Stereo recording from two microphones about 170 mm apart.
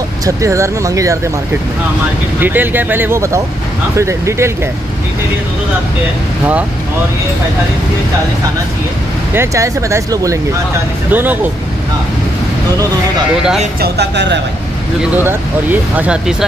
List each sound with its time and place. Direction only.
0.2 s speech: 20° right (ahead or behind)
2.4 s speech: 10° right (ahead or behind)
9.3 s speech: 15° right (ahead or behind)
13.7 s speech: 70° right (ahead or behind); by 14.4 s 90° right
15.2 s speech: 10° right (ahead or behind)